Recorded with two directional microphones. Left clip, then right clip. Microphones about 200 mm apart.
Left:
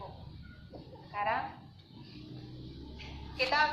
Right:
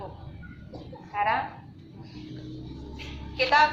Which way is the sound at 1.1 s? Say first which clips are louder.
Right 7 dB; 25° right (ahead or behind).